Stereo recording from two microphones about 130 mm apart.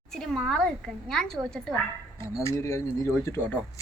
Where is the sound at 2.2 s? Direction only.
20° left (ahead or behind).